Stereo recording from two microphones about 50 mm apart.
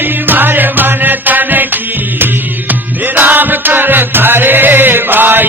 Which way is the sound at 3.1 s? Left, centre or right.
Right.